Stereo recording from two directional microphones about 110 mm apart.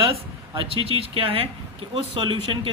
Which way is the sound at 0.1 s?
60° right (ahead or behind).